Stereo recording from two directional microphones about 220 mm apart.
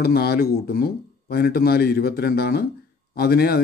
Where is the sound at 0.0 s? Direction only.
45° left (ahead or behind).